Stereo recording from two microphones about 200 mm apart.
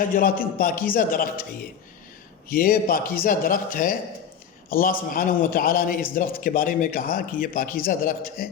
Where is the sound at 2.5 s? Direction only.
45° left (ahead or behind).